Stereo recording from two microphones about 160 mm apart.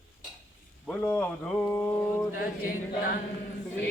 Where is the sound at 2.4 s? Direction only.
60° left (ahead or behind).